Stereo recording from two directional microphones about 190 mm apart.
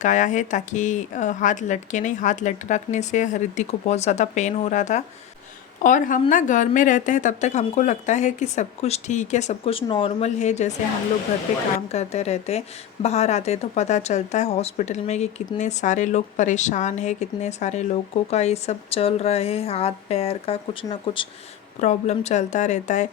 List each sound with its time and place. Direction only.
0.0 s a woman's voice: 40° left (ahead or behind)
11.9 s a woman's voice: 35° left (ahead or behind)